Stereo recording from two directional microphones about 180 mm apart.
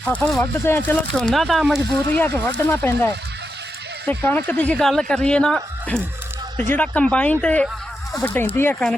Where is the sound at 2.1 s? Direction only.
10° left (ahead or behind).